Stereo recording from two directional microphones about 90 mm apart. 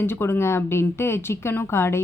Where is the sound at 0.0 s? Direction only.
25° left (ahead or behind).